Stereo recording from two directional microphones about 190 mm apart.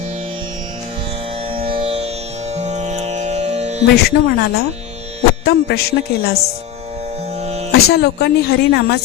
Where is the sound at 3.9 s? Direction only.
55° left (ahead or behind).